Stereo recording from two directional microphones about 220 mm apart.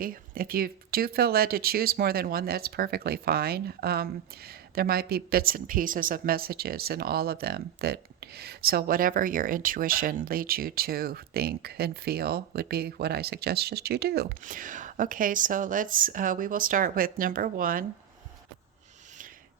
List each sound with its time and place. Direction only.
0.0 s speech: 40° right (ahead or behind)